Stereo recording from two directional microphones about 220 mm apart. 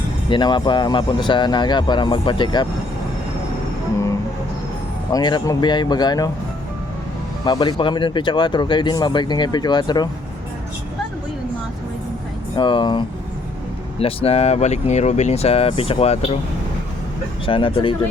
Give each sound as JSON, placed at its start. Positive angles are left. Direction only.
{"t": 0.3, "sound": "speech", "side_deg": 20}
{"t": 5.1, "sound": "speech", "side_deg": 15}
{"t": 7.4, "sound": "speech", "side_deg": 20}
{"t": 12.5, "sound": "speech", "side_deg": 20}
{"t": 17.4, "sound": "speech", "side_deg": 25}